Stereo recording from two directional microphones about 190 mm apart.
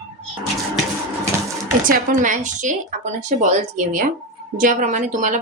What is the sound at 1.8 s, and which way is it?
A woman's voice, 45° right (ahead or behind).